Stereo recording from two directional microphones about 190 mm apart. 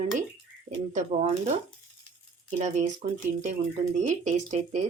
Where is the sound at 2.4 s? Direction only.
40° right (ahead or behind).